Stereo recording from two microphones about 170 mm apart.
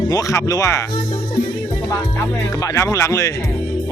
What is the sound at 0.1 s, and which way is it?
Speech, 20° left (ahead or behind).